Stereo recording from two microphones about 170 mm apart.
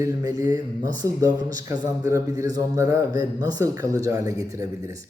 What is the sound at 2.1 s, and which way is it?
A man's voice, 15° right (ahead or behind).